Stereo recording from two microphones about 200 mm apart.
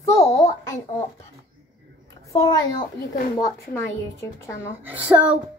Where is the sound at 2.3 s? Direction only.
20° left (ahead or behind).